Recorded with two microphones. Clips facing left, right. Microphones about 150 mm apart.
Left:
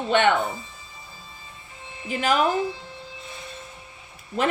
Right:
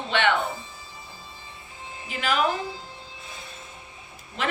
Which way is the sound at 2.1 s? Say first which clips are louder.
Left 5 dB; 45° left (ahead or behind).